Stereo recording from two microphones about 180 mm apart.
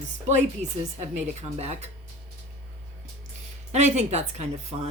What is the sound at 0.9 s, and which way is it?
Speech, 40° right (ahead or behind).